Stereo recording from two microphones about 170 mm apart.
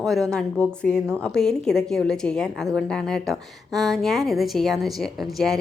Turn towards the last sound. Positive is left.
turn(degrees=0)  # may be behind; listen again after turning